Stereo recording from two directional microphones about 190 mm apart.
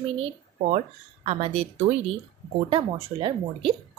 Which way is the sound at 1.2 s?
30° right (ahead or behind).